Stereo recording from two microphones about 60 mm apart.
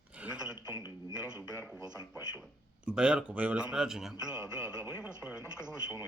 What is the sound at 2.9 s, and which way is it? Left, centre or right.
A man's voice, centre.